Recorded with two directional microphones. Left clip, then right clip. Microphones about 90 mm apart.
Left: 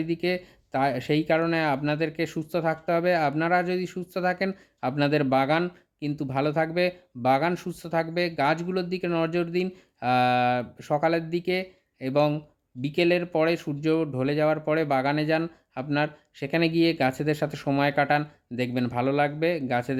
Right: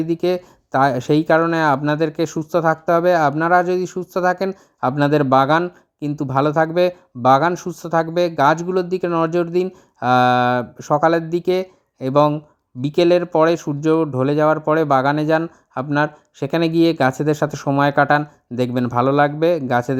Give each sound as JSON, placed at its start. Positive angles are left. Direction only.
{"t": 0.0, "sound": "speech", "side_deg": -45}
{"t": 18.8, "sound": "speech", "side_deg": -40}